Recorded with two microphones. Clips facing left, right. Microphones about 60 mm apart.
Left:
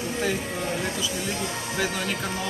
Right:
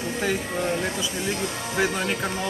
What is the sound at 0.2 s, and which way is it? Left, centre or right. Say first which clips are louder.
Speech: right 3 dB; centre.